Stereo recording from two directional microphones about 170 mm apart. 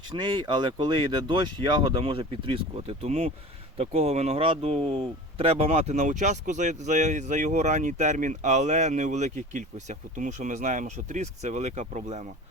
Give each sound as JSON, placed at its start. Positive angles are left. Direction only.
{"t": 0.1, "sound": "speech", "side_deg": -25}